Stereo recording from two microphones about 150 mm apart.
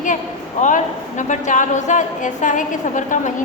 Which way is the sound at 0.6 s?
55° left (ahead or behind).